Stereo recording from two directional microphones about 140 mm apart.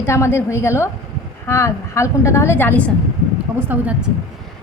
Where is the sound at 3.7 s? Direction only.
15° right (ahead or behind).